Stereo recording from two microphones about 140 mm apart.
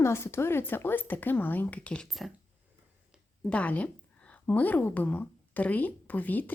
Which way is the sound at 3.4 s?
10° left (ahead or behind).